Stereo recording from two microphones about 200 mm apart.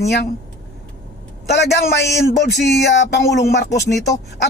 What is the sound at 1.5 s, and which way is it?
Speech, 55° left (ahead or behind).